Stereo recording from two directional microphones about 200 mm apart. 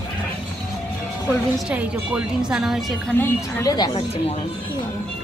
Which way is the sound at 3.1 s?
15° left (ahead or behind).